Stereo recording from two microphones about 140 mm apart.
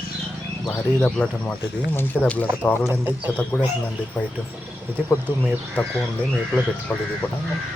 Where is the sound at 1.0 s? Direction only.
10° left (ahead or behind).